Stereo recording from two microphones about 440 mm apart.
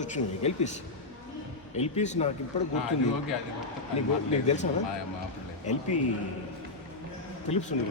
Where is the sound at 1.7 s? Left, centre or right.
Centre.